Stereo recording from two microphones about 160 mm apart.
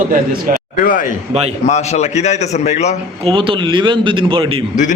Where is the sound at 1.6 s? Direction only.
45° left (ahead or behind).